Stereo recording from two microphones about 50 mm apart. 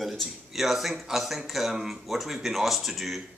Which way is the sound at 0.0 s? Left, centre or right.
Centre.